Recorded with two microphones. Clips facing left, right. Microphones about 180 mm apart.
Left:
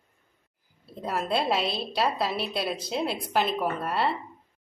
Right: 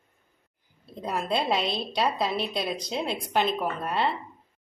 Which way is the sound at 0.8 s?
5° left (ahead or behind).